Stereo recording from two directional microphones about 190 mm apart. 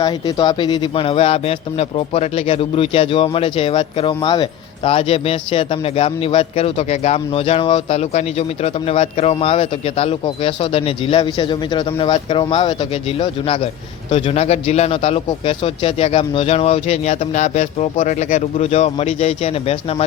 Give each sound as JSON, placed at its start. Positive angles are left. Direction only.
{"t": 0.0, "sound": "speech", "side_deg": 20}